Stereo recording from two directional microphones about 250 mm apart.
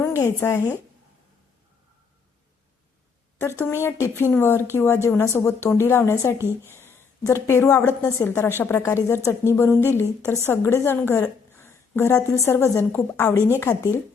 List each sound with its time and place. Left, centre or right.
0.0 s a sound: centre
0.3 s a woman's voice: centre
4.2 s a woman's voice: centre
9.1 s a woman's voice: centre
9.5 s a woman's voice: centre